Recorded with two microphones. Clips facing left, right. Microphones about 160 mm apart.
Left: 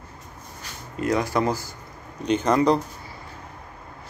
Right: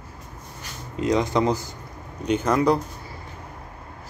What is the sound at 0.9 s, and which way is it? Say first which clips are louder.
Speech: right 2 dB; 20° right (ahead or behind).